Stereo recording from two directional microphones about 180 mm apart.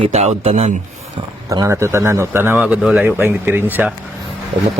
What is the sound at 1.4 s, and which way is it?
A man's voice, 20° right (ahead or behind).